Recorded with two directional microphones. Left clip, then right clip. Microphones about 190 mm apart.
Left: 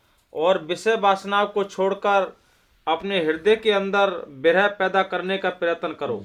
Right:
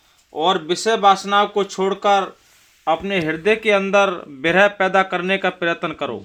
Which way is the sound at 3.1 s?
50° right (ahead or behind).